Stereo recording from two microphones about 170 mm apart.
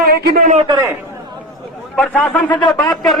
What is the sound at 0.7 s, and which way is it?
Speech, 15° right (ahead or behind).